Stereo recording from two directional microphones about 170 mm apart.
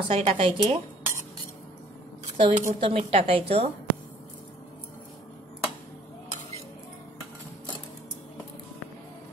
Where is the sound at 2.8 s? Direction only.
35° right (ahead or behind).